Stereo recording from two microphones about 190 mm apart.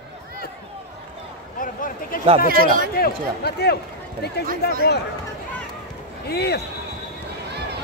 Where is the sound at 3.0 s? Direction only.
55° left (ahead or behind).